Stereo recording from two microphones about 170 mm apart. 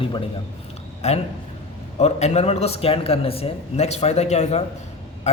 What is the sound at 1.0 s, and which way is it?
A man's voice, 40° left (ahead or behind).